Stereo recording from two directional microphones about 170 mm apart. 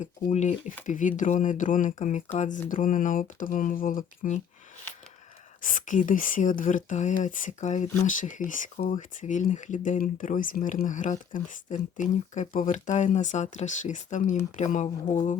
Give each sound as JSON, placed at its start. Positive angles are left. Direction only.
{"t": 0.3, "sound": "speech", "side_deg": 45}
{"t": 5.6, "sound": "speech", "side_deg": 50}